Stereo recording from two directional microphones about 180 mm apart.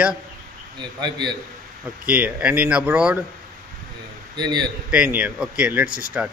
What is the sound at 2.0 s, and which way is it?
Speech, 5° right (ahead or behind).